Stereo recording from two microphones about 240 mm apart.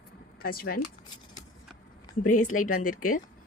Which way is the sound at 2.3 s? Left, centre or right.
Left.